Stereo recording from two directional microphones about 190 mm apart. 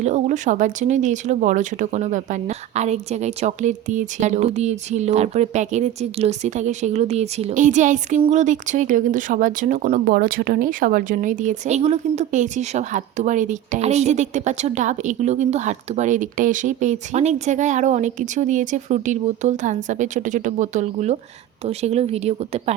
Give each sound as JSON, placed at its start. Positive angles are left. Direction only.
{"t": 0.0, "sound": "speech", "side_deg": -40}